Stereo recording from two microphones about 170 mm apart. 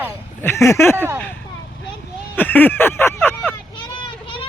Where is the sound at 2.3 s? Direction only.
10° left (ahead or behind).